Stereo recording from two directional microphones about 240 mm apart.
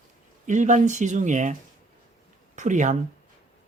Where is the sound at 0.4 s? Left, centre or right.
Right.